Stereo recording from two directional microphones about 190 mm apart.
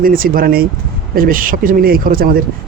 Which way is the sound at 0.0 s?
50° right (ahead or behind).